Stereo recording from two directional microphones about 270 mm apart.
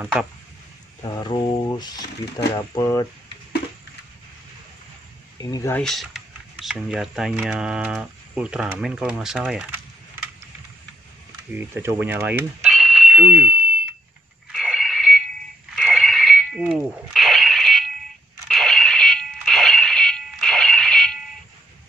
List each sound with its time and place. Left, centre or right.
0.0 s speech: centre
1.0 s speech: centre
5.4 s speech: centre
11.5 s speech: centre
14.5 s a sound: centre